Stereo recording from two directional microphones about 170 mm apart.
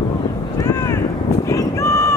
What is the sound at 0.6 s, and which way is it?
Vehicle, 15° left (ahead or behind).